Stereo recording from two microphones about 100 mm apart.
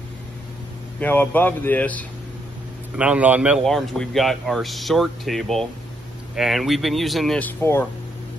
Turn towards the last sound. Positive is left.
turn(degrees=25)  # may be behind; listen again after turning